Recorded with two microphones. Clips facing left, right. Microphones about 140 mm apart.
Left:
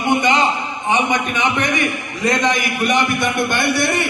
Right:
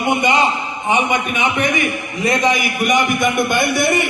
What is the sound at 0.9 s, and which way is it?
A man's voice, 10° right (ahead or behind).